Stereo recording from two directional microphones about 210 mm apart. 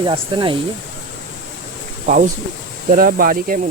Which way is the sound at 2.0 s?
40° right (ahead or behind).